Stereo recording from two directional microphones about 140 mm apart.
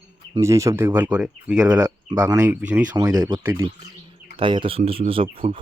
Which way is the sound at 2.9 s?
25° right (ahead or behind).